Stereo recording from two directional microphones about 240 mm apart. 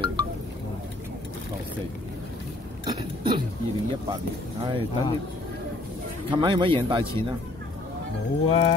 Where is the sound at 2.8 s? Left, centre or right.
Centre.